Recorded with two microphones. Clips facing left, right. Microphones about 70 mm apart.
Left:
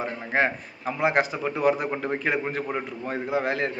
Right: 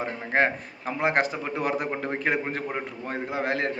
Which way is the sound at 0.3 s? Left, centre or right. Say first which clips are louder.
Right 1 dB; right.